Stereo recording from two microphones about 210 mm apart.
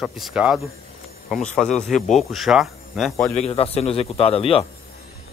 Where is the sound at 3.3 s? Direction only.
30° left (ahead or behind).